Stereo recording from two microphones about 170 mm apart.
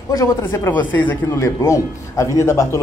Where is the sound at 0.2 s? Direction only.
15° left (ahead or behind).